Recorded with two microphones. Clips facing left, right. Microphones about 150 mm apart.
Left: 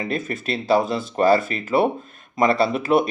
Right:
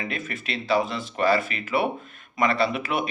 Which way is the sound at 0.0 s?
35° left (ahead or behind).